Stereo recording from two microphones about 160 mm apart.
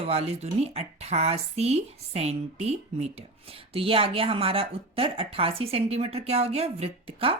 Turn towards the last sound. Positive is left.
turn(degrees=-35)  # may be behind; listen again after turning